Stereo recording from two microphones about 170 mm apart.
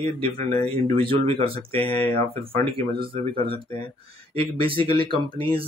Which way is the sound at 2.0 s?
10° left (ahead or behind).